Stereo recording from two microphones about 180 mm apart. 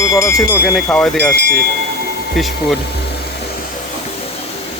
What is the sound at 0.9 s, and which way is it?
Speech, 5° left (ahead or behind).